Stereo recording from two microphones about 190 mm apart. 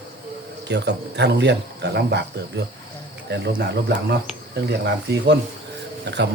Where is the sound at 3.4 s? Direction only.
60° right (ahead or behind).